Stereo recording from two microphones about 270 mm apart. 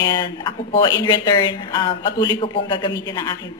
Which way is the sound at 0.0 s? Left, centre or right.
Centre.